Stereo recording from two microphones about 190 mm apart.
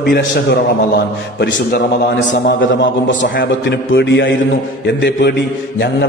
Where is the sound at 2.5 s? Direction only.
75° left (ahead or behind).